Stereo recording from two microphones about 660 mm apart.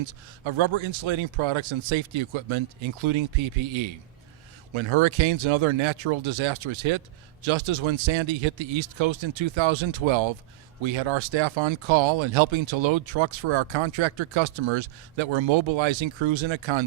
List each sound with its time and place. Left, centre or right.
0.0 s speech: right